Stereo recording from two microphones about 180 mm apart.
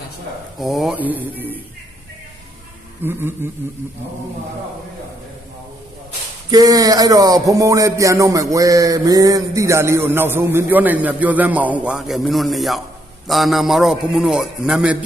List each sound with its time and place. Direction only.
0.6 s speech: centre (ahead or behind)
3.0 s speech: 10° right (ahead or behind)
6.5 s a man's voice: 20° right (ahead or behind); by 14.9 s 5° right (ahead or behind)